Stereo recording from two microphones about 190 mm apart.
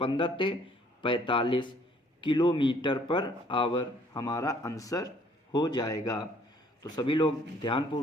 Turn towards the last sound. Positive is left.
turn(degrees=25)  # may be behind; listen again after turning